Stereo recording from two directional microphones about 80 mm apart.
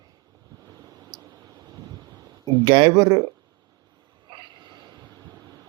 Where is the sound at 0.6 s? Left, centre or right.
Right.